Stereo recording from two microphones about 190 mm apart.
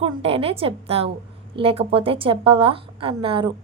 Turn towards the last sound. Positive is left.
turn(degrees=-25)  # may be behind; listen again after turning